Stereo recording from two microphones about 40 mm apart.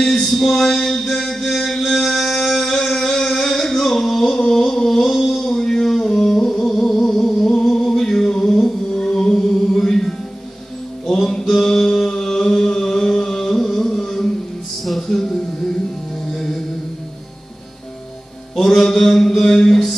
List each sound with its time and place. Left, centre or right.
0.0 s a sound: centre
0.6 s music: centre
1.8 s a sound: centre
6.1 s music: centre
11.2 s chant: centre
15.0 s music: centre
18.6 s mantra: centre